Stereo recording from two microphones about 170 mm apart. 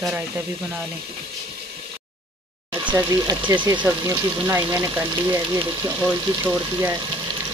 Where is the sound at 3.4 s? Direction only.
25° right (ahead or behind).